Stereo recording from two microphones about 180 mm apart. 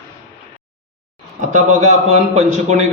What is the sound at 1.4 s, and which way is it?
A man's voice, 40° right (ahead or behind).